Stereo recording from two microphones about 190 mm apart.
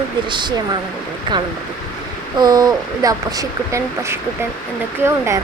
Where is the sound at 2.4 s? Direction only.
20° right (ahead or behind).